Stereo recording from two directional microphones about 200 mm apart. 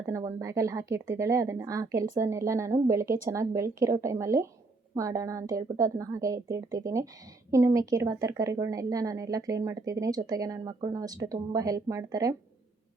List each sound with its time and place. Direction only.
0.1 s a woman's voice: 15° right (ahead or behind)